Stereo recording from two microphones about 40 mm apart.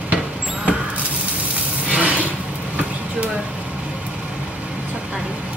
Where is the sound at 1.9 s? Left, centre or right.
Right.